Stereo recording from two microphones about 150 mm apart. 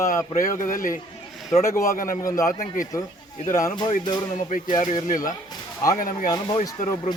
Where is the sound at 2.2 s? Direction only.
20° left (ahead or behind).